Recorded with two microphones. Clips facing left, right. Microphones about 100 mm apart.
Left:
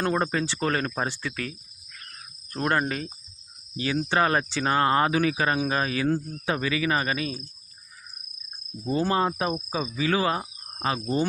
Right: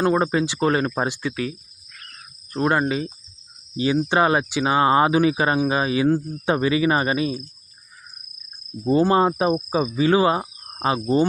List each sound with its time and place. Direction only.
0.0 s speech: 15° right (ahead or behind)
6.4 s speech: 25° right (ahead or behind)
8.8 s speech: 35° right (ahead or behind)